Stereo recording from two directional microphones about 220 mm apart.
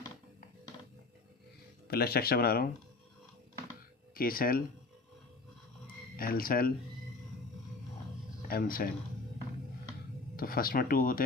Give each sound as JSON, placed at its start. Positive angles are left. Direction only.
{"t": 1.9, "sound": "speech", "side_deg": 45}
{"t": 4.1, "sound": "speech", "side_deg": 40}
{"t": 6.1, "sound": "speech", "side_deg": 40}
{"t": 8.4, "sound": "speech", "side_deg": 40}
{"t": 10.3, "sound": "speech", "side_deg": 40}